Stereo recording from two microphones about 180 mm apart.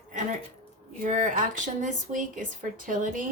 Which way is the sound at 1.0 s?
45° right (ahead or behind).